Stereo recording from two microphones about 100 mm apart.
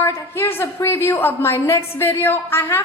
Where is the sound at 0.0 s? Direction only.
25° left (ahead or behind).